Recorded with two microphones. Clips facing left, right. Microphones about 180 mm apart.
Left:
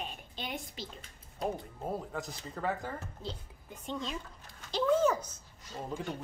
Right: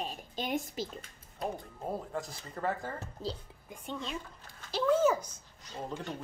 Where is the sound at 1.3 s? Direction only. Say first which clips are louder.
Left 2 dB; centre (ahead or behind).